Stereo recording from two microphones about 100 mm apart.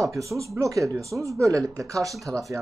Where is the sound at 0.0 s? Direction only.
30° right (ahead or behind).